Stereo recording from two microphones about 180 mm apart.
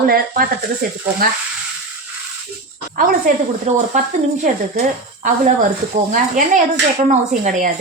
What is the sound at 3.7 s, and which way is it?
Speech, 35° right (ahead or behind).